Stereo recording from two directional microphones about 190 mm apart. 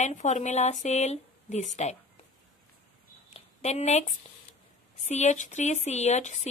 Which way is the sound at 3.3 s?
35° left (ahead or behind).